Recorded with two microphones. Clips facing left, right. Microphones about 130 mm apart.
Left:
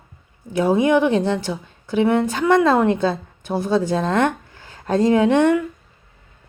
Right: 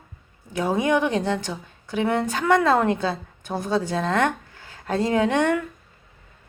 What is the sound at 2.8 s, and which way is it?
A woman's voice, 35° left (ahead or behind).